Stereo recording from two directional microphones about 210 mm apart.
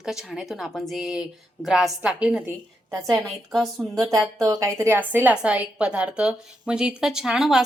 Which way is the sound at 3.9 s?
15° right (ahead or behind).